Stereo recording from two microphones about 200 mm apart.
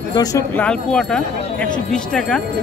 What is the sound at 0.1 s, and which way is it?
Speech, 20° left (ahead or behind).